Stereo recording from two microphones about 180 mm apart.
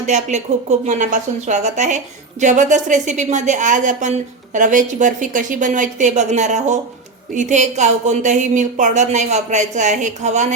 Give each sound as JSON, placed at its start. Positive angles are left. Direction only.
{"t": 0.0, "sound": "a woman's voice", "side_deg": -40}